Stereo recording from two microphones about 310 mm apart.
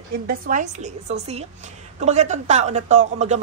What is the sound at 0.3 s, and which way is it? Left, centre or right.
A woman's voice, right.